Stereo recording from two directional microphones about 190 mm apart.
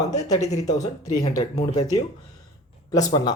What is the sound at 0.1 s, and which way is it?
Speech, 20° left (ahead or behind).